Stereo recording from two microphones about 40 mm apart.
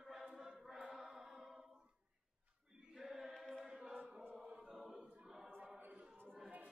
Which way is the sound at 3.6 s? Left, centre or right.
Centre.